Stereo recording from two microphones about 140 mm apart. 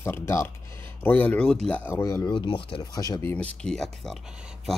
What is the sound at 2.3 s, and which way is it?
Speech, 35° left (ahead or behind).